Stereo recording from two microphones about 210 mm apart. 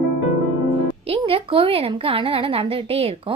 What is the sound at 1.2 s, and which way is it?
Speech, 25° right (ahead or behind).